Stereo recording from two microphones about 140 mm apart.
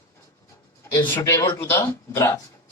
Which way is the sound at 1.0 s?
15° left (ahead or behind).